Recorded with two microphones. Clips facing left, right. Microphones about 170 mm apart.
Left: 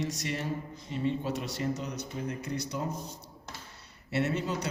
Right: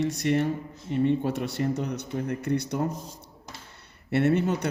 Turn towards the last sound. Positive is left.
turn(degrees=-60)  # may be behind; listen again after turning